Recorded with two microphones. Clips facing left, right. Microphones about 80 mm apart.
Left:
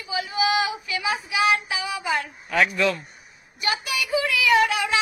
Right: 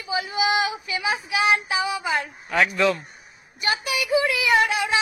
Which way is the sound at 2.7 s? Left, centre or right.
Right.